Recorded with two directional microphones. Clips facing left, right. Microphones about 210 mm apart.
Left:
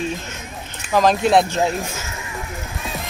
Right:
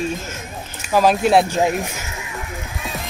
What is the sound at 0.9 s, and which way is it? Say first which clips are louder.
Speech: right 1 dB; 5° right (ahead or behind).